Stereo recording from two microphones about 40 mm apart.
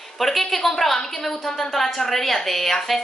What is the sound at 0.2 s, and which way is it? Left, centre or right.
A woman's voice, centre.